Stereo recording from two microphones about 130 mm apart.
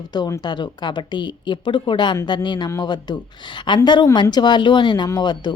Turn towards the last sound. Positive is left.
turn(degrees=35)  # may be behind; listen again after turning